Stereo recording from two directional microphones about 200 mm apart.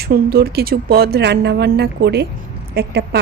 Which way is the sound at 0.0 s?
50° right (ahead or behind).